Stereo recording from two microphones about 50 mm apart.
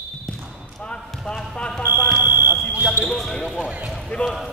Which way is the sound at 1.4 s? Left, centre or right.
Centre.